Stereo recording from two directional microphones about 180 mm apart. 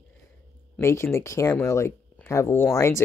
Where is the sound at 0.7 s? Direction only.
15° left (ahead or behind).